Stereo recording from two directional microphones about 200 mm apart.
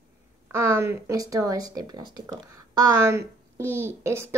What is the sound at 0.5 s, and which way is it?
Speech, 15° right (ahead or behind).